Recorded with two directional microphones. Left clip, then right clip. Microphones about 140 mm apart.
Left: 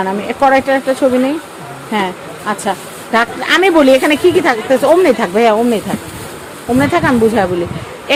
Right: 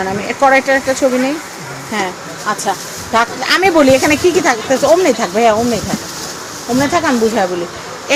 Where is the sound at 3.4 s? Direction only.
25° left (ahead or behind).